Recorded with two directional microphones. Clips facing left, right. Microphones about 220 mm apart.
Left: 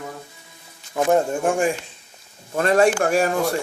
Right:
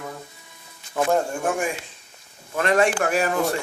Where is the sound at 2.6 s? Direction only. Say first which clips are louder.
Left 3 dB; 35° left (ahead or behind).